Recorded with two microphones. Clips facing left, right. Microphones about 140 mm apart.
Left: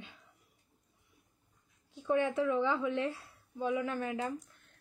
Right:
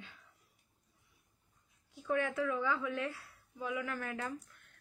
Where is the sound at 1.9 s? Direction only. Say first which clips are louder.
Left 4 dB; 20° left (ahead or behind).